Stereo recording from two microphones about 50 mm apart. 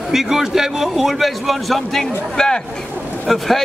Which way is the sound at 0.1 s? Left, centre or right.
Centre.